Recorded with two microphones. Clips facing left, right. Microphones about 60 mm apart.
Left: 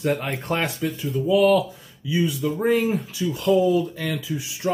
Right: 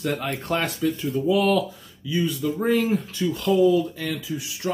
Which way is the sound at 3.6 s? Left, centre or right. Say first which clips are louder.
Right 1 dB; left.